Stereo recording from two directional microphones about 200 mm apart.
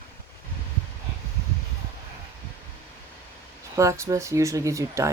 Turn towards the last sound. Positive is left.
turn(degrees=-15)  # may be behind; listen again after turning